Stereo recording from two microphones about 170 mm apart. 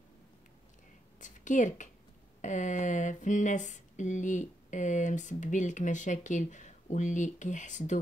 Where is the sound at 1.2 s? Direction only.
45° left (ahead or behind).